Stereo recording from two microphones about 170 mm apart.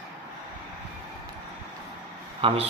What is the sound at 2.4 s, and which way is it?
Speech, 35° right (ahead or behind).